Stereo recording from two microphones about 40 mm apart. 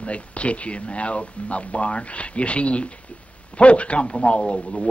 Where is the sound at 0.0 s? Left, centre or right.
Left.